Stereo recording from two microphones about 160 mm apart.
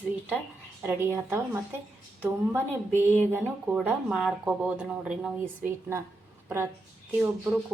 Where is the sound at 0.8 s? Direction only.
15° right (ahead or behind).